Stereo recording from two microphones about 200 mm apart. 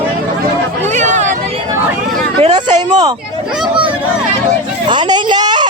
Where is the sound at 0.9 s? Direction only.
35° right (ahead or behind).